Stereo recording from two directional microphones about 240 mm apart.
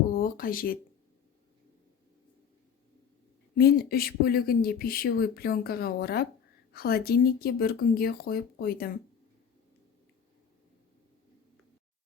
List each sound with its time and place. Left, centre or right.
0.2 s speech: left
3.6 s speech: left